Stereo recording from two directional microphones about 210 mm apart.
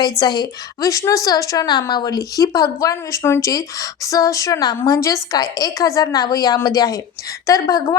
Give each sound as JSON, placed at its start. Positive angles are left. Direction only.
{"t": 0.0, "sound": "a woman's voice", "side_deg": 20}